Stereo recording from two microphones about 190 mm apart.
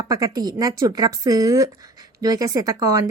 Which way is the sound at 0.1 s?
20° right (ahead or behind).